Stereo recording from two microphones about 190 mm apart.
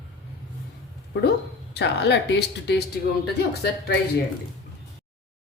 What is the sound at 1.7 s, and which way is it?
Speech, 65° left (ahead or behind).